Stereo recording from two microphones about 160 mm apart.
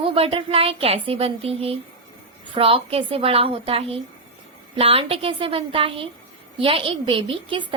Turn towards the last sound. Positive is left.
turn(degrees=-30)  # may be behind; listen again after turning